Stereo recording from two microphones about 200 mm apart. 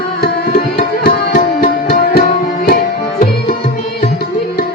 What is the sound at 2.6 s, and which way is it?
Tabla, 45° left (ahead or behind).